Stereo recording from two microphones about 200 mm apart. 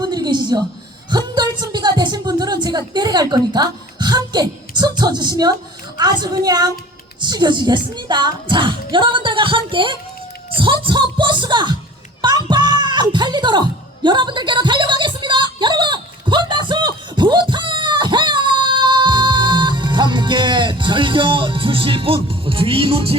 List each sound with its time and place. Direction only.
0.0 s a woman's voice: 20° right (ahead or behind)
12.5 s music: 20° right (ahead or behind)